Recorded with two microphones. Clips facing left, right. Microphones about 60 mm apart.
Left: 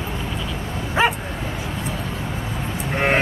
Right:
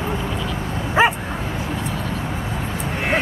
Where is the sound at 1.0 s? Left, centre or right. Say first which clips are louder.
Right 3 dB; centre.